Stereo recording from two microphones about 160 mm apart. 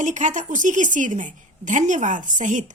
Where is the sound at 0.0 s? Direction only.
50° right (ahead or behind).